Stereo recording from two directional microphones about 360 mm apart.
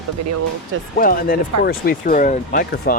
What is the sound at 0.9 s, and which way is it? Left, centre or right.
Speech, left.